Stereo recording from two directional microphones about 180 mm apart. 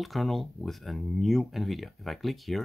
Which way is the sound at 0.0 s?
Centre (ahead or behind).